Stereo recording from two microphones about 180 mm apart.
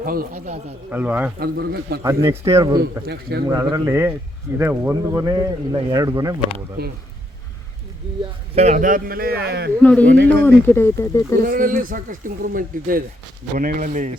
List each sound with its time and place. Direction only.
0.0 s a man's voice: 55° right (ahead or behind)
0.9 s speech: 10° right (ahead or behind)
1.4 s speech: 60° right (ahead or behind)
2.0 s speech: 15° right (ahead or behind)
3.1 s speech: 65° right (ahead or behind)
3.5 s speech: 20° right (ahead or behind)
6.8 s speech: 60° right (ahead or behind)
8.5 s speech: 40° right (ahead or behind); by 9.7 s 60° right (ahead or behind)
9.8 s speech: 10° left (ahead or behind)
11.3 s speech: 50° right (ahead or behind)